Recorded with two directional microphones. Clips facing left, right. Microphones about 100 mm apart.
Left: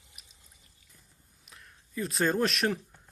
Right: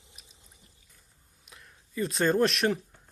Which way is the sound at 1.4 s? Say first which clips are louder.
Right 1 dB; centre (ahead or behind).